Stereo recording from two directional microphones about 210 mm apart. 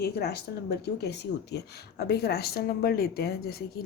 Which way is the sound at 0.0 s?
50° left (ahead or behind).